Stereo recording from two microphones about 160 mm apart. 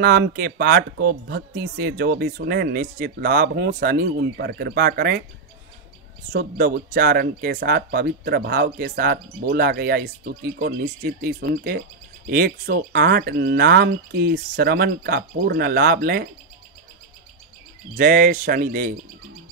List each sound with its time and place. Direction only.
0.0 s speech: 70° right (ahead or behind)
6.3 s speech: 65° right (ahead or behind)
17.9 s speech: 60° right (ahead or behind)